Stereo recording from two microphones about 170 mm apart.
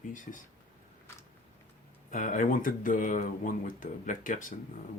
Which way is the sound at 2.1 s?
50° left (ahead or behind).